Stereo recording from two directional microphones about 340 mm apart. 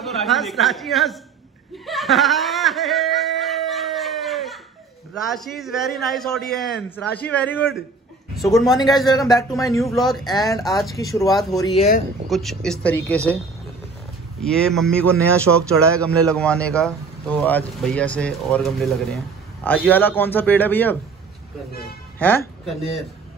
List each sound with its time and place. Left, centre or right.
0.0 s speech: centre
1.9 s snicker: centre
5.1 s speech: centre
11.6 s speech: centre
12.3 s speech: centre
14.4 s speech: centre
22.2 s speech: centre